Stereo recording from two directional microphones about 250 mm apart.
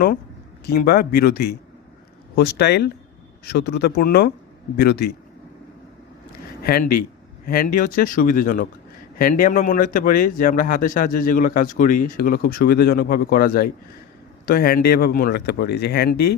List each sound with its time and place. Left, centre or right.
0.7 s speech: left
6.6 s speech: left